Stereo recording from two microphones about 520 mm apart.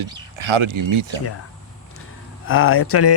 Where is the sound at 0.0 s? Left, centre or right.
Right.